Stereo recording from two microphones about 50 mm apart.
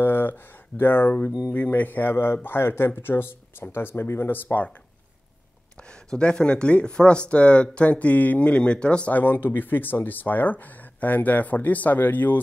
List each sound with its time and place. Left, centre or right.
0.0 s speech: left
6.0 s speech: centre
9.1 s speech: left